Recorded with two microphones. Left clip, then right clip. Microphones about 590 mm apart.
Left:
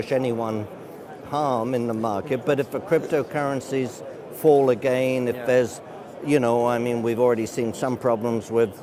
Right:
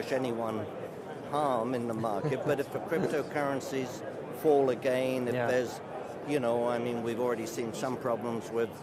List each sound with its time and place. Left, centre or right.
0.1 s speech: left